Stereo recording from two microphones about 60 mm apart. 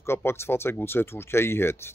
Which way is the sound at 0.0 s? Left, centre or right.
Left.